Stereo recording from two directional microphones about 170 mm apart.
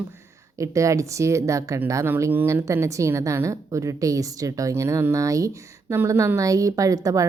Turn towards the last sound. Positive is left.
turn(degrees=-20)  # may be behind; listen again after turning